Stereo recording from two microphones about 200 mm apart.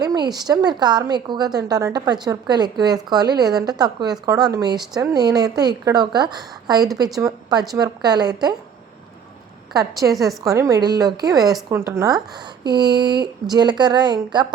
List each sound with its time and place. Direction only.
0.0 s a woman's voice: 20° right (ahead or behind)
10.0 s a woman's voice: 10° right (ahead or behind)